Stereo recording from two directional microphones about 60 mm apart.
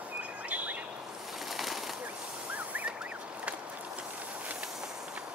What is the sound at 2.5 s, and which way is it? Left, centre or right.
Vehicle, right.